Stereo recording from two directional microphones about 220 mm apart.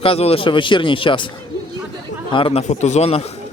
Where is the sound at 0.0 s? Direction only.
25° left (ahead or behind).